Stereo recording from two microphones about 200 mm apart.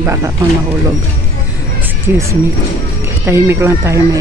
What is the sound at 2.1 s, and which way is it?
Speech, 10° right (ahead or behind).